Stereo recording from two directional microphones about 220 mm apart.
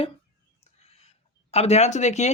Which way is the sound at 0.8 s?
30° left (ahead or behind).